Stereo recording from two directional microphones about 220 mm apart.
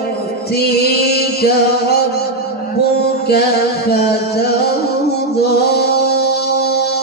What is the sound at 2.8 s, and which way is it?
Music, 45° left (ahead or behind).